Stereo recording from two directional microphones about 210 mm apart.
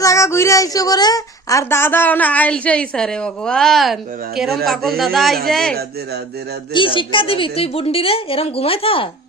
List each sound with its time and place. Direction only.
0.0 s a woman's voice: 15° left (ahead or behind)
6.7 s a woman's voice: 25° left (ahead or behind)